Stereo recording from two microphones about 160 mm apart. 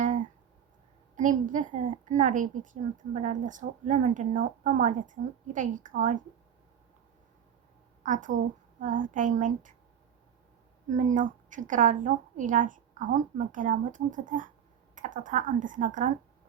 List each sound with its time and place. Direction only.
0.0 s a sound: 55° right (ahead or behind)
1.1 s a woman's voice: 55° right (ahead or behind)
8.0 s a woman's voice: 55° right (ahead or behind)
10.8 s a woman's voice: 50° right (ahead or behind)